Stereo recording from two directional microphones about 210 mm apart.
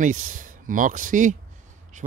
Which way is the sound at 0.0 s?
40° right (ahead or behind).